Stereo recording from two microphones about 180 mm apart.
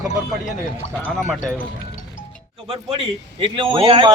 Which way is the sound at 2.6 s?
35° right (ahead or behind).